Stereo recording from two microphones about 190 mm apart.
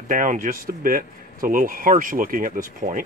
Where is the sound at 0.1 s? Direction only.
45° right (ahead or behind).